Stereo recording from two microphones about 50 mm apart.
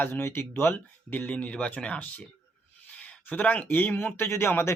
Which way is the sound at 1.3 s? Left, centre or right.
Left.